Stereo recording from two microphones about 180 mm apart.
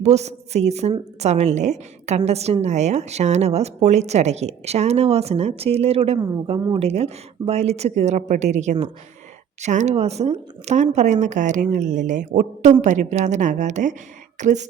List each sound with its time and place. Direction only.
0.0 s a woman's voice: 35° right (ahead or behind)